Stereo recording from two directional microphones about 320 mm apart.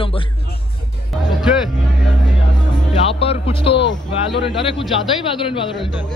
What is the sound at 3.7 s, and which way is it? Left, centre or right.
Speech, left.